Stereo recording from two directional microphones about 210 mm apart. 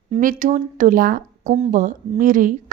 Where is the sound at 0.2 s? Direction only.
40° right (ahead or behind).